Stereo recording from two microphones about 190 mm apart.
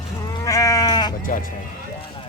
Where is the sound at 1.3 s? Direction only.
45° left (ahead or behind).